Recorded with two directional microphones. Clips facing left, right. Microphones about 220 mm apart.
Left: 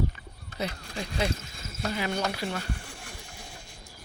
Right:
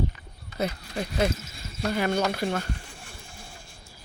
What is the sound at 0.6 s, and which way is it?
Speech, 50° right (ahead or behind).